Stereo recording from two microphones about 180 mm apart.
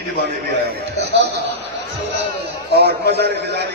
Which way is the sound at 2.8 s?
65° right (ahead or behind).